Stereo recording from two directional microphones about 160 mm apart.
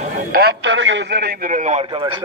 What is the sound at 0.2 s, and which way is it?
A man's voice, 70° right (ahead or behind).